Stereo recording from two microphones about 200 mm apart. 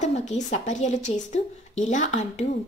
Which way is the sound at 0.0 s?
35° left (ahead or behind).